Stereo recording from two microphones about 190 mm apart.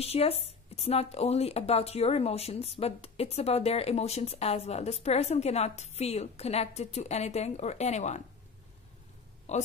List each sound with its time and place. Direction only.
0.0 s a woman's voice: 30° left (ahead or behind)
9.5 s a woman's voice: 35° left (ahead or behind)